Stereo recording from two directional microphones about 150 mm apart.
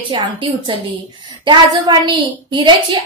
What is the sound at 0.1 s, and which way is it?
A woman's voice, 35° right (ahead or behind).